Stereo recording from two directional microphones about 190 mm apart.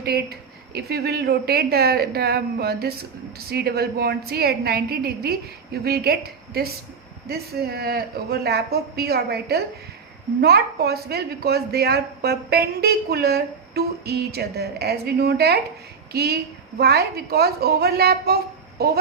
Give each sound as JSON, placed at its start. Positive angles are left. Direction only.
{"t": 0.0, "sound": "speech", "side_deg": -55}